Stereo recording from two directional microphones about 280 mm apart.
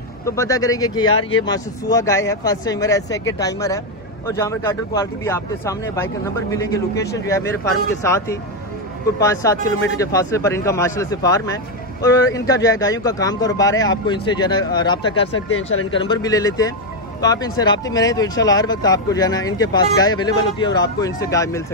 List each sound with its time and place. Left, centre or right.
0.2 s speech: centre
15.5 s speech: left
15.9 s speech: centre